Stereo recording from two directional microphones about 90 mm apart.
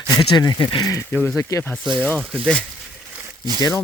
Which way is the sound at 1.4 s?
30° left (ahead or behind).